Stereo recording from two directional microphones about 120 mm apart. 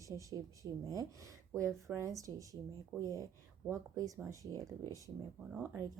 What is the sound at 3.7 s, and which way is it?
Speech, 25° right (ahead or behind).